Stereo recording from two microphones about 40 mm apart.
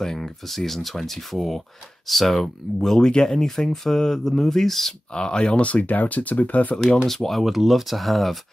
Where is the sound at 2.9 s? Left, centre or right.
Centre.